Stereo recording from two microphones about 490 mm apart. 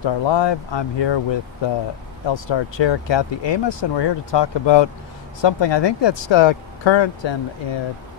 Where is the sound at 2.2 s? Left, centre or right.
Left.